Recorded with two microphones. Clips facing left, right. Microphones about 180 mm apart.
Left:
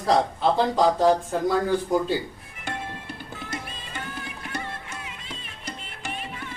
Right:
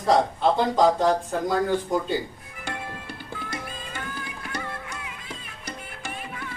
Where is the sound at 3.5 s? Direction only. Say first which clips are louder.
Left 1 dB; 20° left (ahead or behind).